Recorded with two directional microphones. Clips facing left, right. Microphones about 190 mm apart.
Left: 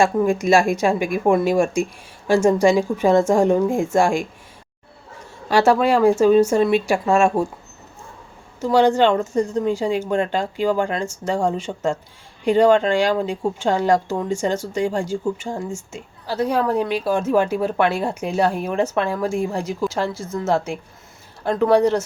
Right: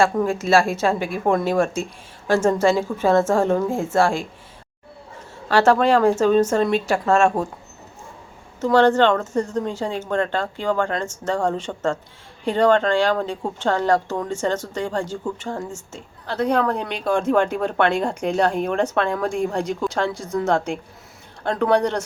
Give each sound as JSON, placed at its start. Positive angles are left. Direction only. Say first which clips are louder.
{"t": 0.0, "sound": "speech", "louder": "left 2 dB", "side_deg": 15}
{"t": 5.5, "sound": "speech", "louder": "even", "side_deg": 10}
{"t": 8.6, "sound": "speech", "louder": "even", "side_deg": 10}